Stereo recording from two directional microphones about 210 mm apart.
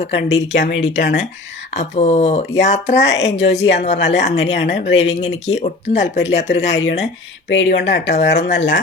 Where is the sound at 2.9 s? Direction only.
55° left (ahead or behind).